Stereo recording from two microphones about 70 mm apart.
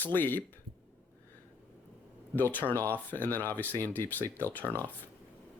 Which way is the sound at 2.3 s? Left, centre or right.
Left.